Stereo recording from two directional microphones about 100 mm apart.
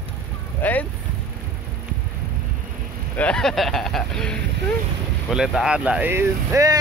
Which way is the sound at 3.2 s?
10° left (ahead or behind).